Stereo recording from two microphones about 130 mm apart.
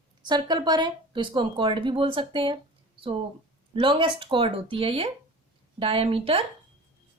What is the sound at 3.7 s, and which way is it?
Speech, 40° right (ahead or behind).